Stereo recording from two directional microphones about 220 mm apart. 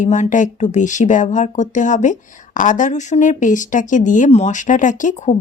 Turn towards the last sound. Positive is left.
turn(degrees=35)  # may be behind; listen again after turning